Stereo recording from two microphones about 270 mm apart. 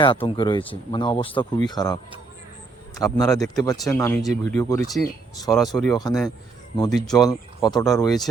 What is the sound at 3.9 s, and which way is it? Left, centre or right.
Speech, centre.